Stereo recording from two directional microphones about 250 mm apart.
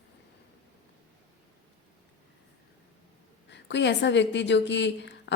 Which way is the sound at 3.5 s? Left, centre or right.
Left.